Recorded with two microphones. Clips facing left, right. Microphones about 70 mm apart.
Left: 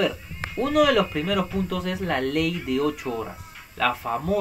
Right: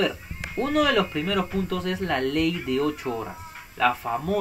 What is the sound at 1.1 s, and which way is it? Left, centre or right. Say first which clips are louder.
Speech: left 1 dB; centre.